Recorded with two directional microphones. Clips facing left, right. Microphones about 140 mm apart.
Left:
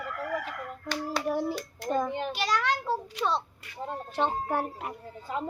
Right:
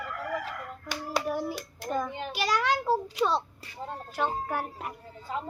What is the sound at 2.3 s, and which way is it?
A woman's voice, 5° right (ahead or behind).